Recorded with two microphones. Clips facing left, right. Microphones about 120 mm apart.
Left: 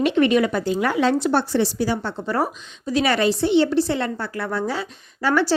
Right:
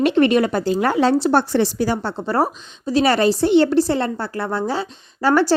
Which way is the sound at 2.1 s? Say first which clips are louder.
Right 3 dB; 30° right (ahead or behind).